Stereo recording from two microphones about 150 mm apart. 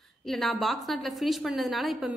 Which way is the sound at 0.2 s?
Centre (ahead or behind).